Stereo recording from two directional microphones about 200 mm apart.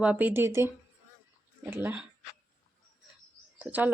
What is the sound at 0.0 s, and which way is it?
Speech, 5° right (ahead or behind).